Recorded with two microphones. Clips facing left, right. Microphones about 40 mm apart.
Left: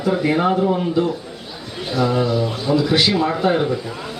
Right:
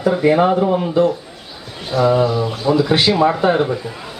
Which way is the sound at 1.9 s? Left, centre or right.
Centre.